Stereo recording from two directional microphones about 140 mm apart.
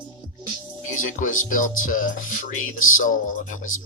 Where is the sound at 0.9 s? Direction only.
70° left (ahead or behind).